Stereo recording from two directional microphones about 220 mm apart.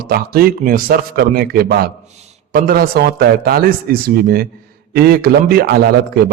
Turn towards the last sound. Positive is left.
turn(degrees=-45)  # may be behind; listen again after turning